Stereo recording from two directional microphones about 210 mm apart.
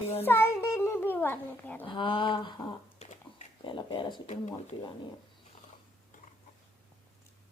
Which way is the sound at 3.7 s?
20° left (ahead or behind).